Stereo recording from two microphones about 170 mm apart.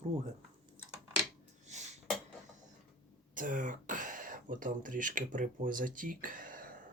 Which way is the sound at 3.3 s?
50° right (ahead or behind).